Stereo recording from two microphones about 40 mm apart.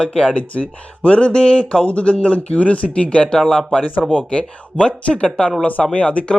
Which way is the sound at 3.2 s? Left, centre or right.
Centre.